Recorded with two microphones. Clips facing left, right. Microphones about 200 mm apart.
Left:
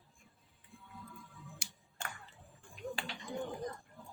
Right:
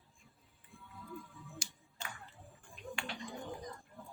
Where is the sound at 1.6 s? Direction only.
60° left (ahead or behind).